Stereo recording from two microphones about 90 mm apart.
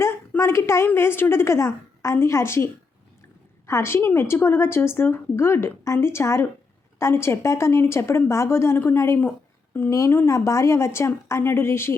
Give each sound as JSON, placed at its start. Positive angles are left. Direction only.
{"t": 0.0, "sound": "a sound", "side_deg": 30}
{"t": 0.9, "sound": "a woman's voice", "side_deg": 25}
{"t": 3.7, "sound": "a woman's voice", "side_deg": 30}